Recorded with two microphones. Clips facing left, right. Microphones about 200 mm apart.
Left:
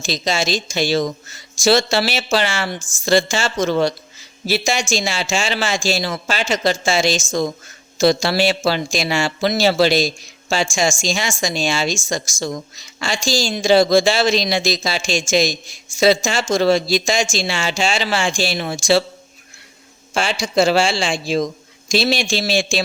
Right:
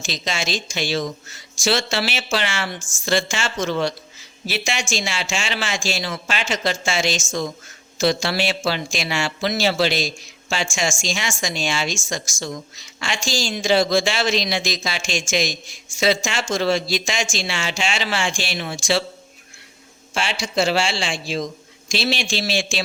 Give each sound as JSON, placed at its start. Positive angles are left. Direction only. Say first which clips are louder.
{"t": 0.0, "sound": "a woman's voice", "louder": "left 6 dB", "side_deg": 35}
{"t": 20.1, "sound": "a woman's voice", "louder": "left 5 dB", "side_deg": 40}